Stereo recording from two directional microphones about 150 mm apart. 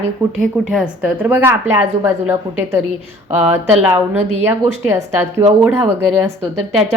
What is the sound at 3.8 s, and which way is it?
A woman's voice, 20° right (ahead or behind).